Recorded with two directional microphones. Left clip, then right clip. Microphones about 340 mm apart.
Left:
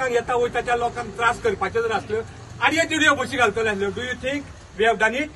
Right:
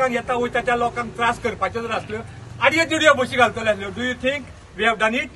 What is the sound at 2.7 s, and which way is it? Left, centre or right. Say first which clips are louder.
A man's voice: right 3 dB; centre.